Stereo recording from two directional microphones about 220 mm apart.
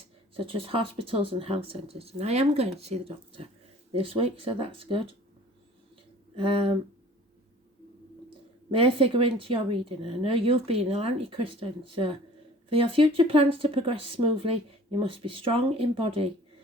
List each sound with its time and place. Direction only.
0.3 s speech: 25° right (ahead or behind)
6.3 s speech: 25° right (ahead or behind)
8.7 s speech: 25° right (ahead or behind)